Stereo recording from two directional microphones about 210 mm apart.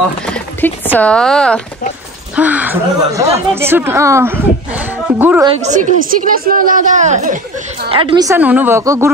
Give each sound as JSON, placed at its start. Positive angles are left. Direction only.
{"t": 0.3, "sound": "speech", "side_deg": 10}
{"t": 2.3, "sound": "speech", "side_deg": -5}
{"t": 5.7, "sound": "speech", "side_deg": -40}
{"t": 7.9, "sound": "speech", "side_deg": -25}